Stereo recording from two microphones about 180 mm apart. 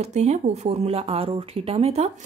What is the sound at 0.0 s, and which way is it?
A woman's voice, 40° right (ahead or behind).